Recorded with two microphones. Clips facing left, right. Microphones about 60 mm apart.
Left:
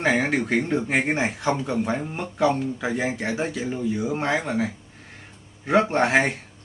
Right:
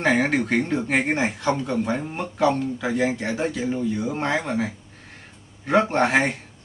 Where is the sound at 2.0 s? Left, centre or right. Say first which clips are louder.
Right 1 dB; centre.